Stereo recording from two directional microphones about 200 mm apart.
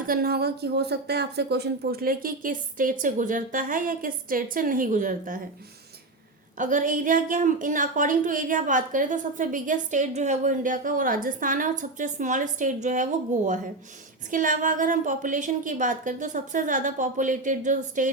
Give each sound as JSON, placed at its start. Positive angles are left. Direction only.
{"t": 0.1, "sound": "a woman's voice", "side_deg": -50}
{"t": 6.6, "sound": "a woman's voice", "side_deg": -40}